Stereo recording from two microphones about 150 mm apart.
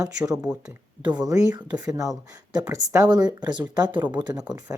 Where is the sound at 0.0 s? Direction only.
25° right (ahead or behind).